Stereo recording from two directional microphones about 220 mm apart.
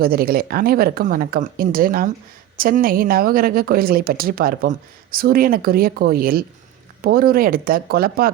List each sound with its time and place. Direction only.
0.0 s speech: 45° right (ahead or behind)